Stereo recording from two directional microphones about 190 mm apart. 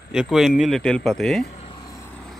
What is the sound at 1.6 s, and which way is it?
Vehicle, 20° left (ahead or behind).